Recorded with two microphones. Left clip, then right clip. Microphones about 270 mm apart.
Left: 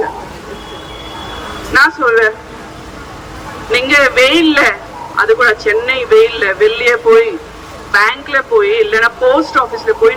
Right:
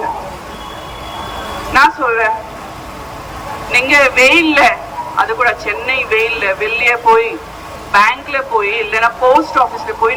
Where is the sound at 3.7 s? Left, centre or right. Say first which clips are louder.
Even; centre.